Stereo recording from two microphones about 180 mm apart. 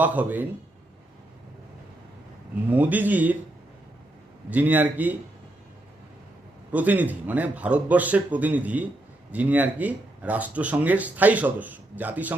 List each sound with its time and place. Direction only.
0.0 s speech: 10° right (ahead or behind)
2.6 s speech: 10° right (ahead or behind)
4.4 s speech: 10° right (ahead or behind)
6.7 s speech: 10° right (ahead or behind)